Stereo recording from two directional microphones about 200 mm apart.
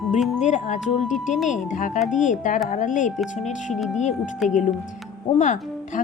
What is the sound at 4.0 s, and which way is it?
Speech, 35° left (ahead or behind).